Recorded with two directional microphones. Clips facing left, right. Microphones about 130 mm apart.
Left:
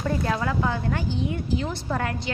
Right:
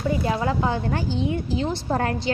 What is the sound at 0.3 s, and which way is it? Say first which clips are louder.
A woman's voice: right 2 dB; 20° right (ahead or behind).